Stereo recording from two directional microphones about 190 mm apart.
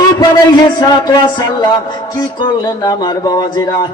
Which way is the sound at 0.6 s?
20° left (ahead or behind).